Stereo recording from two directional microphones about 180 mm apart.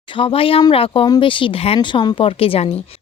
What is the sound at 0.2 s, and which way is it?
A woman's voice, 30° left (ahead or behind).